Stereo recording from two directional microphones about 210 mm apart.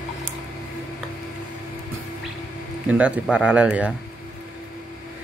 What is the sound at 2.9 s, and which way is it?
Speech, 5° right (ahead or behind).